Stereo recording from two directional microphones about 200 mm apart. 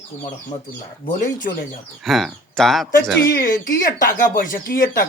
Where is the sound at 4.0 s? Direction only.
45° left (ahead or behind).